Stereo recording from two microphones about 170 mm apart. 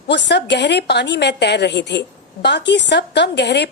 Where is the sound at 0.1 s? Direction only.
90° left.